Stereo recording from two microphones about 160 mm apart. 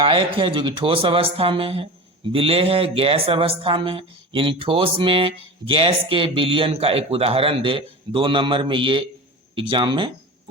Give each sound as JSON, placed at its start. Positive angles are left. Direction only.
{"t": 0.0, "sound": "speech", "side_deg": -35}